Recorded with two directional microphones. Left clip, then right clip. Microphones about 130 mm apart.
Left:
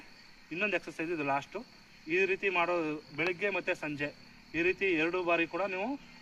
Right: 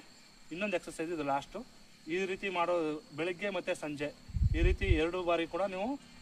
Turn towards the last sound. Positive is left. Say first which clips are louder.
# left 1 dB
turn(degrees=-25)  # may be behind; listen again after turning